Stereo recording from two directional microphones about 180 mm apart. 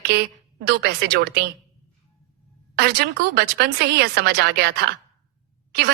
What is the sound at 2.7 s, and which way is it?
A woman's voice, 65° right (ahead or behind).